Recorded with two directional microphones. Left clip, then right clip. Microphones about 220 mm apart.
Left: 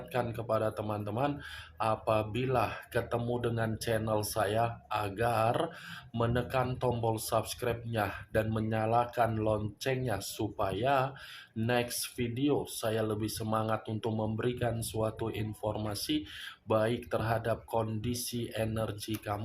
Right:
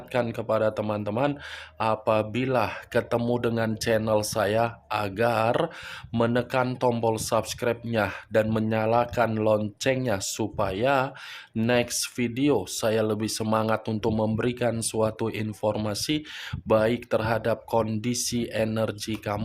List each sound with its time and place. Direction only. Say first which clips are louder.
0.1 s speech: right 7 dB; 45° right (ahead or behind)